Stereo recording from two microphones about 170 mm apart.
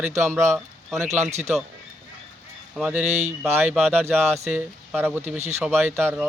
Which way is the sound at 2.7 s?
10° right (ahead or behind).